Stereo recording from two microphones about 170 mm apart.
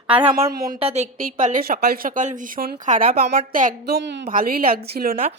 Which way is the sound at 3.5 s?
55° right (ahead or behind).